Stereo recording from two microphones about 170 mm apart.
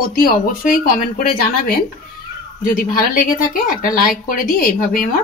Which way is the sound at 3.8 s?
55° left (ahead or behind).